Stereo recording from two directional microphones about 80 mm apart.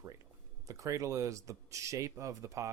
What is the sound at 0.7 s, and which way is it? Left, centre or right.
Speech, right.